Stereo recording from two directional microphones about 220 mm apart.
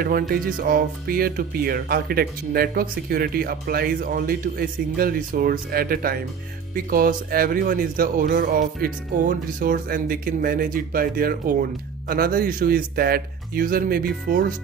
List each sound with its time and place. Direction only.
0.3 s speech: 40° right (ahead or behind)